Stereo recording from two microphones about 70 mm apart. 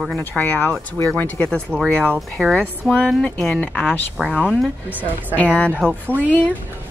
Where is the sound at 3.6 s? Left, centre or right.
Left.